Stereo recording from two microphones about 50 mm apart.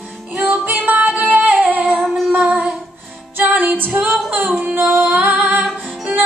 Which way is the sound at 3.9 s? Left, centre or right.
Centre.